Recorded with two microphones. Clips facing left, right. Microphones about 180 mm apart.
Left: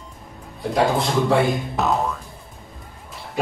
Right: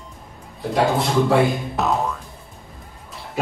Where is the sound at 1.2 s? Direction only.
Centre (ahead or behind).